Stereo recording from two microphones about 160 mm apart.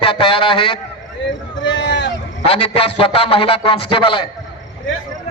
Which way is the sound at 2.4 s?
35° left (ahead or behind).